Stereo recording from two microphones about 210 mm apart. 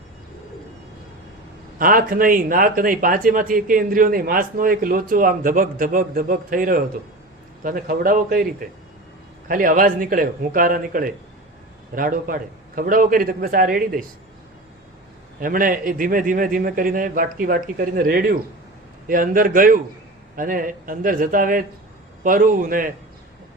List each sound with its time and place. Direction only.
1.8 s a man's voice: 40° right (ahead or behind)
9.5 s speech: 40° right (ahead or behind)
15.4 s speech: 40° right (ahead or behind)